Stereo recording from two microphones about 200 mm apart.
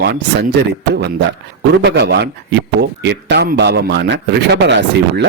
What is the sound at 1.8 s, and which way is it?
A man's voice, 55° right (ahead or behind).